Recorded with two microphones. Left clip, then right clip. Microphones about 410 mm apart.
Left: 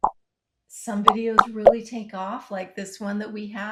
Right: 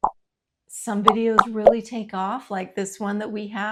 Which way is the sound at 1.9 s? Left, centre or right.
Right.